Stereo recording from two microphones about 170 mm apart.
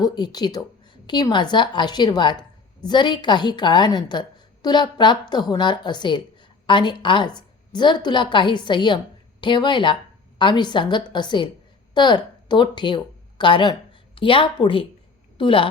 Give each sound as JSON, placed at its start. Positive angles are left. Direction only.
{"t": 0.0, "sound": "a woman's voice", "side_deg": 25}